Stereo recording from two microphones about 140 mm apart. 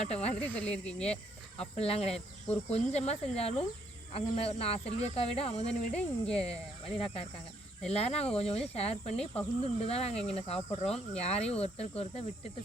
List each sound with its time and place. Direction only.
0.0 s speech: 50° left (ahead or behind)
0.3 s speech: 10° left (ahead or behind)
1.5 s speech: 45° left (ahead or behind)
6.0 s speech: 5° left (ahead or behind)
7.0 s speech: 45° left (ahead or behind)